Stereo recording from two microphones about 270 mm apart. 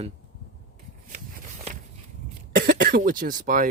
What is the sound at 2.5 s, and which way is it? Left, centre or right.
Speech, right.